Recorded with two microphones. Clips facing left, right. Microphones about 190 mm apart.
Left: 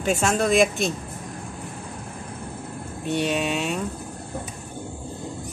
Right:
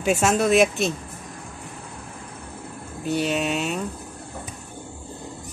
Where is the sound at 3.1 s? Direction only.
Centre (ahead or behind).